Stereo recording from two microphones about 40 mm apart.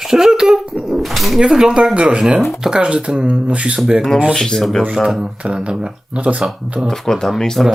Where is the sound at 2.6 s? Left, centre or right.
Centre.